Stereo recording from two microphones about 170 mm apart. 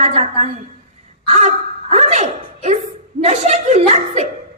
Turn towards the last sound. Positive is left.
turn(degrees=-40)  # may be behind; listen again after turning